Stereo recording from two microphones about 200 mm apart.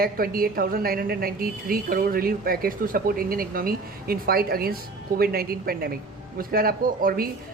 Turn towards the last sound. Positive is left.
turn(degrees=-45)  # may be behind; listen again after turning